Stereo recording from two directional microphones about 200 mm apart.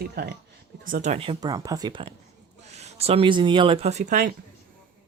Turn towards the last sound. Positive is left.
turn(degrees=-40)  # may be behind; listen again after turning